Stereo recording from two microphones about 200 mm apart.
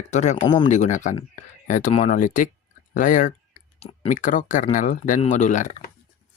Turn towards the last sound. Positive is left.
turn(degrees=40)  # may be behind; listen again after turning